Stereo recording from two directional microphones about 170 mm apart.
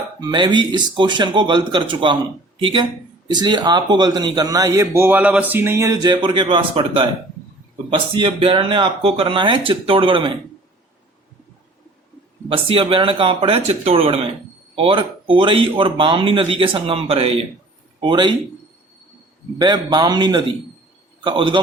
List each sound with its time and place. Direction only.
0.2 s a man's voice: 25° right (ahead or behind)
12.5 s a man's voice: 30° right (ahead or behind)
19.5 s a man's voice: 25° right (ahead or behind)